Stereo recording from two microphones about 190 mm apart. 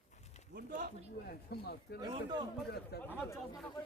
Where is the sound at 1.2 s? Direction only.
55° left (ahead or behind).